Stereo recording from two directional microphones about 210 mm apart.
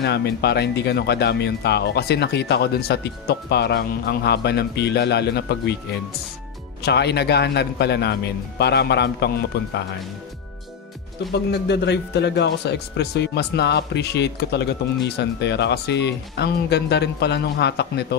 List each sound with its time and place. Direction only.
0.0 s a man's voice: 50° left (ahead or behind)
11.3 s a man's voice: 55° left (ahead or behind)